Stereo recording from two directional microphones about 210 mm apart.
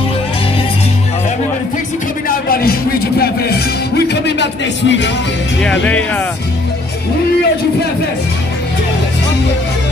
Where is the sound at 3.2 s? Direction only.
50° left (ahead or behind).